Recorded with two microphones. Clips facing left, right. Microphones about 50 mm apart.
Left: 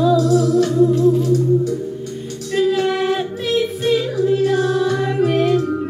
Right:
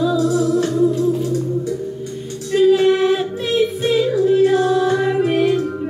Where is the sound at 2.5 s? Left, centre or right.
Centre.